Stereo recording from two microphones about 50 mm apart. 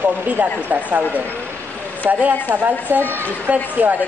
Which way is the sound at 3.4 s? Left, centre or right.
Right.